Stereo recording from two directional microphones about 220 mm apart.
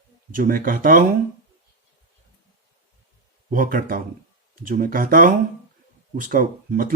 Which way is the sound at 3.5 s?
40° right (ahead or behind).